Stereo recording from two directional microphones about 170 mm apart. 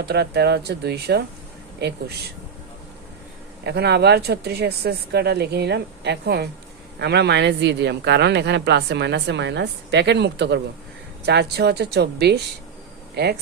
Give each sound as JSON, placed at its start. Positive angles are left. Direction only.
{"t": 0.0, "sound": "speech", "side_deg": -75}
{"t": 3.7, "sound": "speech", "side_deg": -75}
{"t": 11.3, "sound": "speech", "side_deg": -80}